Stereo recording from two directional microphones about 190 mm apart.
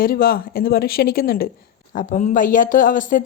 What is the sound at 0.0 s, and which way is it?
Speech, 50° left (ahead or behind).